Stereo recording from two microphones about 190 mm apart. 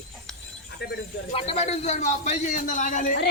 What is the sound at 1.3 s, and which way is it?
A man's voice, 30° left (ahead or behind).